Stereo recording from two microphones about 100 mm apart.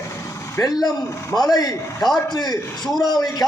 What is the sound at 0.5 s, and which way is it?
A man's voice, 35° left (ahead or behind).